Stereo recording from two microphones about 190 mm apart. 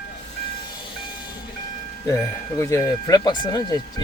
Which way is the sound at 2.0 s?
15° left (ahead or behind).